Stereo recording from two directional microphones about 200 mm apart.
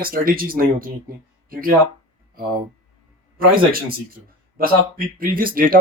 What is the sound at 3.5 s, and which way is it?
Speech, 45° right (ahead or behind).